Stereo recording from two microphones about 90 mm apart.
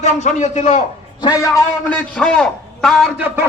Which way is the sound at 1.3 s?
35° left (ahead or behind).